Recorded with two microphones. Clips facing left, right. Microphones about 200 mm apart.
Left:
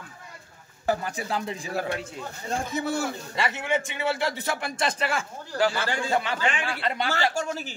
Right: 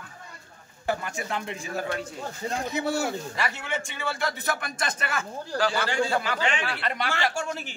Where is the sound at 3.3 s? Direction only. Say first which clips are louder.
Left 4 dB; 20° left (ahead or behind).